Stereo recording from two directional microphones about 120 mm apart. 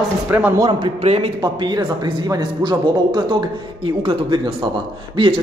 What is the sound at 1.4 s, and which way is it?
A man's voice, 40° right (ahead or behind).